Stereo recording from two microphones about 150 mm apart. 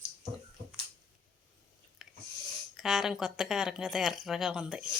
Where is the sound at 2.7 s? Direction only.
Centre (ahead or behind).